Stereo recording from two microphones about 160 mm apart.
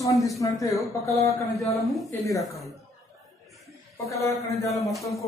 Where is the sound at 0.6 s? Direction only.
20° left (ahead or behind).